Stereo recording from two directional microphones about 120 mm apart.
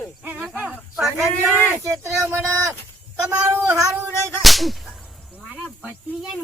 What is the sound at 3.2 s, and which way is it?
Cat, 25° right (ahead or behind).